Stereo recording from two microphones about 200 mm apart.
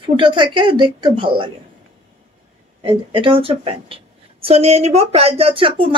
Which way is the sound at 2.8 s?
25° right (ahead or behind).